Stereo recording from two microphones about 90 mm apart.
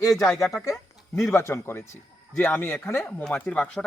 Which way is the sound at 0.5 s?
35° left (ahead or behind).